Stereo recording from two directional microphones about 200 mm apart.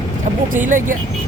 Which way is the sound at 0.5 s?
40° right (ahead or behind).